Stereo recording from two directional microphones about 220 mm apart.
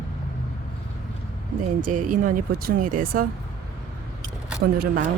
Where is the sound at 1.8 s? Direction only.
35° right (ahead or behind).